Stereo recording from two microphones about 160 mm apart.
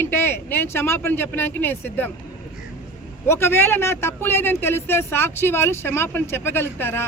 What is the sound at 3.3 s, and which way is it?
Speech, 15° left (ahead or behind).